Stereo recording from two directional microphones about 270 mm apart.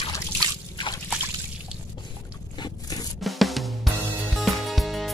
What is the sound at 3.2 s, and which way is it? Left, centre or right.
Drum, centre.